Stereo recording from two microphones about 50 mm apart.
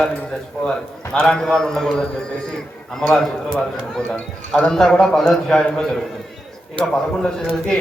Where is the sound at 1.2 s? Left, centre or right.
Centre.